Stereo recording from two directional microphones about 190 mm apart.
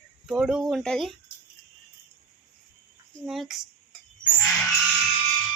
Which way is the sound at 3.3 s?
Centre (ahead or behind).